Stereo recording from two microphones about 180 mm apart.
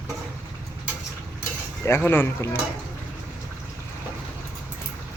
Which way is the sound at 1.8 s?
15° left (ahead or behind).